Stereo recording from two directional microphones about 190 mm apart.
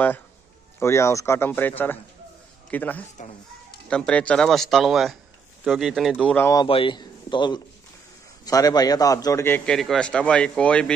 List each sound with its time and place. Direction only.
0.7 s a man's voice: 15° left (ahead or behind)
3.2 s speech: 40° left (ahead or behind)
3.9 s speech: 5° left (ahead or behind)
6.3 s a man's voice: 15° left (ahead or behind)